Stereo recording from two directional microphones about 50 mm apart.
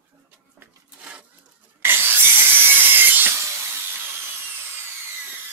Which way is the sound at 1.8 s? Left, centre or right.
Right.